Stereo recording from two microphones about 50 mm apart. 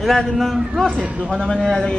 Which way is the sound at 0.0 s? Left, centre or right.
Centre.